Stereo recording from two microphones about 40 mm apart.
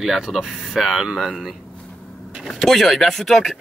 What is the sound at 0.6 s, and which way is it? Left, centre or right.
Speech, centre.